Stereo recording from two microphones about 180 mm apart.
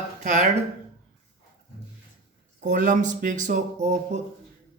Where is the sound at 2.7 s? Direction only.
45° right (ahead or behind).